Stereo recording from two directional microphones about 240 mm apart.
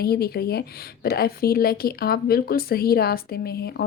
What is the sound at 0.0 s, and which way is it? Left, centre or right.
A woman's voice, left.